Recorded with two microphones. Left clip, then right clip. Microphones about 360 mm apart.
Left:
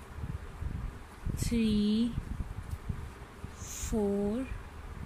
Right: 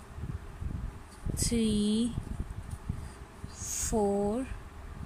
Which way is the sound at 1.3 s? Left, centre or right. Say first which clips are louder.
Right 1 dB; centre.